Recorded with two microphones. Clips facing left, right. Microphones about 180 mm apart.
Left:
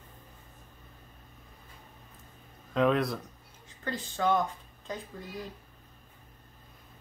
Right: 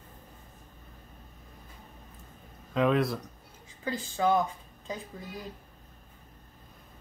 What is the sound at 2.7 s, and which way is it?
Speech, centre (ahead or behind).